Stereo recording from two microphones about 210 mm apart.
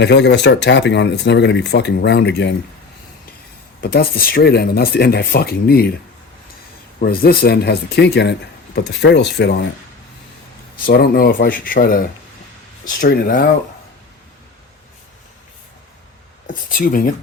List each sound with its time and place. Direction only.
0.0 s speech: 55° left (ahead or behind)
3.8 s speech: 45° left (ahead or behind)
7.0 s speech: 45° left (ahead or behind)
10.8 s speech: 45° left (ahead or behind)
16.5 s speech: 40° left (ahead or behind)